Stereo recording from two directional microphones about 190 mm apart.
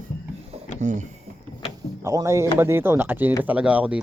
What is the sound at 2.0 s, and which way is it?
Speech, 15° right (ahead or behind).